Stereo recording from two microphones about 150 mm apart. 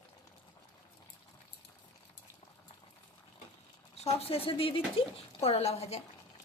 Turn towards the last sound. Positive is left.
turn(degrees=45)  # may be behind; listen again after turning